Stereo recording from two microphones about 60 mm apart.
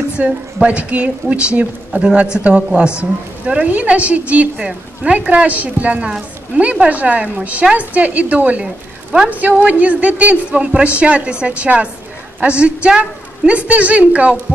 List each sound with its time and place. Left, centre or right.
0.2 s a woman's voice: right